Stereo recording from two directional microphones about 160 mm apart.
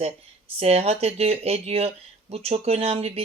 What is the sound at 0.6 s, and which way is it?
Speech, 40° right (ahead or behind).